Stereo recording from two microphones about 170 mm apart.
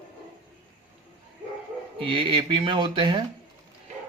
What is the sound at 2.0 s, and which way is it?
Speech, 30° right (ahead or behind).